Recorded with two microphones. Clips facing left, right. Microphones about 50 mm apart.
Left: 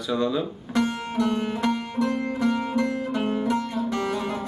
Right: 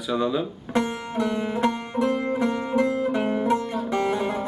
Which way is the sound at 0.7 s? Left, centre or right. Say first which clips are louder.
Even; right.